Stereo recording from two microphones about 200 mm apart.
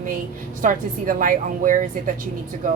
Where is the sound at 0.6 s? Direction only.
45° right (ahead or behind).